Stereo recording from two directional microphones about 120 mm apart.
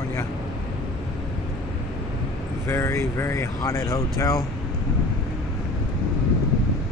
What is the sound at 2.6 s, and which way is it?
Speech, 20° left (ahead or behind).